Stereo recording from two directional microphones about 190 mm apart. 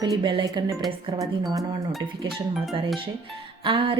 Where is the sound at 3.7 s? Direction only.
25° right (ahead or behind).